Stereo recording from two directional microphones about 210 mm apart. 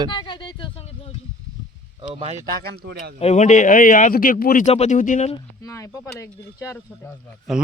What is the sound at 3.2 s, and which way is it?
Speech, 30° left (ahead or behind).